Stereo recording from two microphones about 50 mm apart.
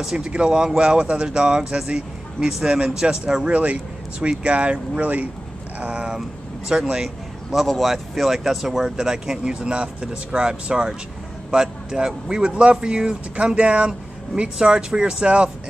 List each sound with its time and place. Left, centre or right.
0.0 s speech: centre
7.6 s speech: centre; by 15.5 s right